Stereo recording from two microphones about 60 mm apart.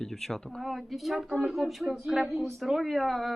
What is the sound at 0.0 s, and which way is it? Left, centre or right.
Speech, centre.